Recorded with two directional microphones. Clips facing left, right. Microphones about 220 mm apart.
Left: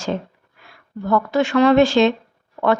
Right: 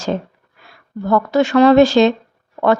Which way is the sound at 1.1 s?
40° right (ahead or behind).